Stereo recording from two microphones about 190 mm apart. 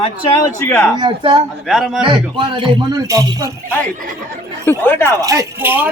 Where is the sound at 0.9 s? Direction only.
25° right (ahead or behind).